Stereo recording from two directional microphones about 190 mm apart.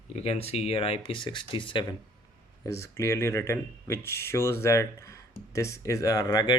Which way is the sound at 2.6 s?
15° left (ahead or behind).